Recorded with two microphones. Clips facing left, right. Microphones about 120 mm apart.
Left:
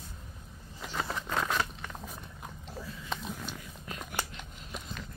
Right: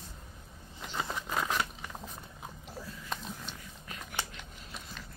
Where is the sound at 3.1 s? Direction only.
5° left (ahead or behind).